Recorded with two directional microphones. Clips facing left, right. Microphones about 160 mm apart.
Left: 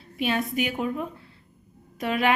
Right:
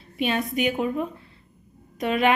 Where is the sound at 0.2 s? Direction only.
5° left (ahead or behind).